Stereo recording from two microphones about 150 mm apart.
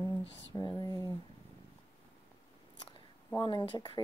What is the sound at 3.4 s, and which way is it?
Speech, 30° left (ahead or behind).